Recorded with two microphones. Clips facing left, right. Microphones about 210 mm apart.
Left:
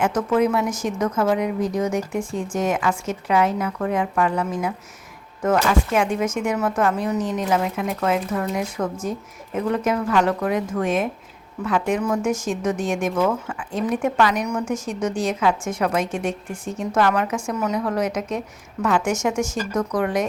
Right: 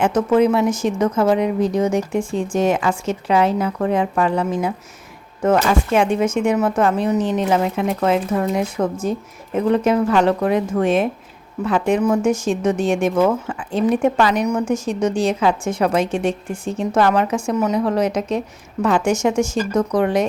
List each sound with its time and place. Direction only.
0.0 s speech: 25° right (ahead or behind)